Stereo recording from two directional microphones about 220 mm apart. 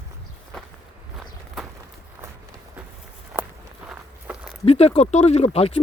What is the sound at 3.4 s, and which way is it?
Walk, 10° right (ahead or behind).